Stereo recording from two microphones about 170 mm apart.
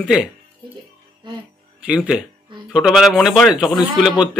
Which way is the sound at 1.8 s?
5° right (ahead or behind).